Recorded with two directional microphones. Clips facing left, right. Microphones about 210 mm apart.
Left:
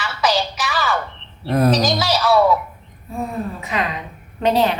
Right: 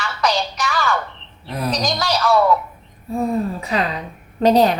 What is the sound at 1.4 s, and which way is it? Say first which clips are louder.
Speech: left 9 dB; 50° left (ahead or behind).